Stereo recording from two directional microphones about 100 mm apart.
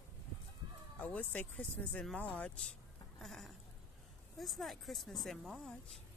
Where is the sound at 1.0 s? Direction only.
15° left (ahead or behind).